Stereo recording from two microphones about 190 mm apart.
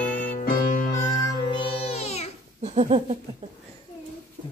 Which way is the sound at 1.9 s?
35° left (ahead or behind).